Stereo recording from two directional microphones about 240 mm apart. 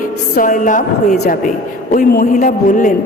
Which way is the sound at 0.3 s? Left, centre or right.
Left.